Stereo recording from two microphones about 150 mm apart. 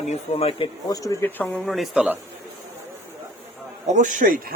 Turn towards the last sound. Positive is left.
turn(degrees=-60)  # may be behind; listen again after turning